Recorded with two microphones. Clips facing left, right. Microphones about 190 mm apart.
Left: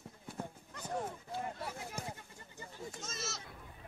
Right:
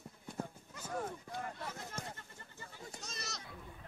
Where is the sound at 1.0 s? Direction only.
10° left (ahead or behind).